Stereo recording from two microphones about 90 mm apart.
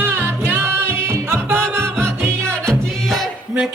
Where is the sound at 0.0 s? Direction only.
25° right (ahead or behind).